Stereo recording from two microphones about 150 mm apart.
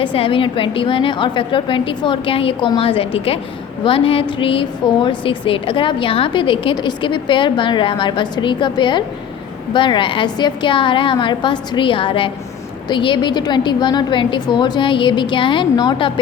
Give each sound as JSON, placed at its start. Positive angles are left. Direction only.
{"t": 0.0, "sound": "a woman's voice", "side_deg": 35}